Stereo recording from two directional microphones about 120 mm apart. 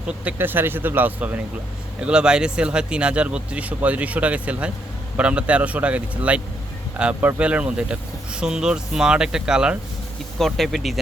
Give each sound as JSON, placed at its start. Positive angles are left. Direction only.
{"t": 0.1, "sound": "speech", "side_deg": -15}